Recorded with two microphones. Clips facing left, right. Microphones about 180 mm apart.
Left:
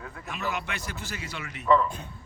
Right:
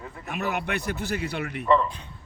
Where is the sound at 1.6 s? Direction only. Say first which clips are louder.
Even; centre (ahead or behind).